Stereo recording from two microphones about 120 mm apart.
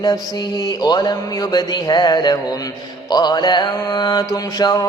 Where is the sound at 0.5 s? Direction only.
35° left (ahead or behind).